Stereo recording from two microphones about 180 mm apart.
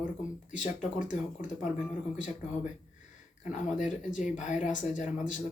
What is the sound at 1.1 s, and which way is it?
Speech, 45° left (ahead or behind).